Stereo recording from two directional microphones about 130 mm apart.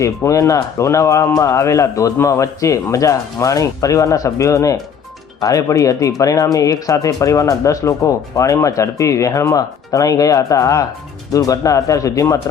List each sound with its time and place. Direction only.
0.0 s speech: 25° left (ahead or behind)